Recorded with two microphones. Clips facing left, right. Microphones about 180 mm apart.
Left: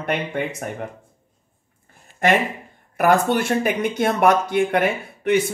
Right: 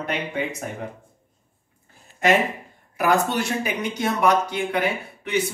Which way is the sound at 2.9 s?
55° left (ahead or behind).